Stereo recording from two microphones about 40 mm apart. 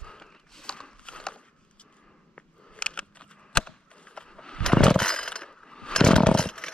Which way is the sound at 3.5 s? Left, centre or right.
Left.